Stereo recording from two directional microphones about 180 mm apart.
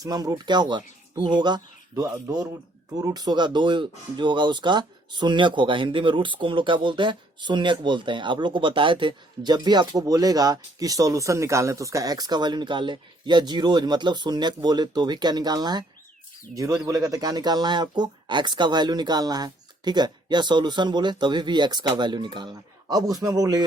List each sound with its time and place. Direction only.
0.0 s speech: 20° right (ahead or behind)